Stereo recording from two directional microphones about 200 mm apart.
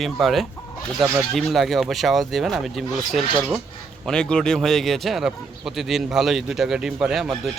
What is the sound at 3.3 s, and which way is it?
Speech, 20° right (ahead or behind).